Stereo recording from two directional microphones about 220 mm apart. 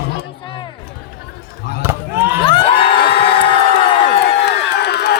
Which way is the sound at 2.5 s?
25° left (ahead or behind).